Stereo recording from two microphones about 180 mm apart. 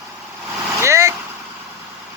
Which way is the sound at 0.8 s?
15° right (ahead or behind).